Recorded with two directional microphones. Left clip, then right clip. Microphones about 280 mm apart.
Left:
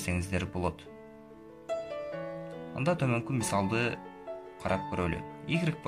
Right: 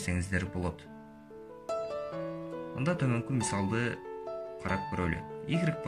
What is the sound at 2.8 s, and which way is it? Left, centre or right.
Speech, centre.